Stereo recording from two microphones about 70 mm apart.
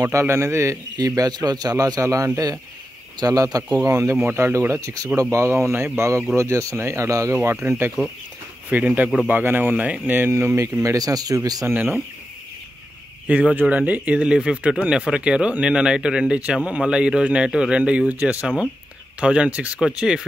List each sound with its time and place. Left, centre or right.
0.0 s speech: right
0.9 s speech: right
3.2 s speech: right
4.0 s speech: right
4.5 s speech: right
7.6 s speech: right
8.6 s speech: right
10.3 s speech: right
11.6 s speech: right
13.3 s speech: centre